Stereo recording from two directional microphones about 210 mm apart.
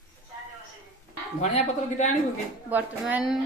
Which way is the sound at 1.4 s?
30° left (ahead or behind).